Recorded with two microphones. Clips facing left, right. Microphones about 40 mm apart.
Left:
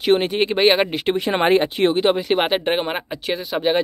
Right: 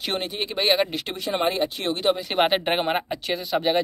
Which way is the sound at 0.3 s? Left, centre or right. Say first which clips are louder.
Left 10 dB; left.